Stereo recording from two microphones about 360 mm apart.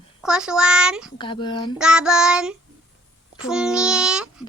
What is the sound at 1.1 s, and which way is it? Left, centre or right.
Speech, centre.